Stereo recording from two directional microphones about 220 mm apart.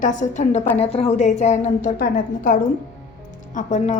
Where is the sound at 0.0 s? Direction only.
35° left (ahead or behind).